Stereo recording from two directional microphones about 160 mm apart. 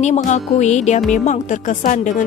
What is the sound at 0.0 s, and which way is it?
A woman's voice, 45° left (ahead or behind).